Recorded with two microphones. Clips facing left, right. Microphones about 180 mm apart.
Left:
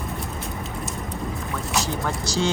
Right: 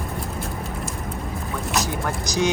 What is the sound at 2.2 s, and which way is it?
Speech, 15° right (ahead or behind).